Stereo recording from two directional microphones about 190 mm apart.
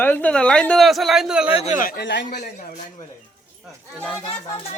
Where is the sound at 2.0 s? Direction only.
70° left (ahead or behind).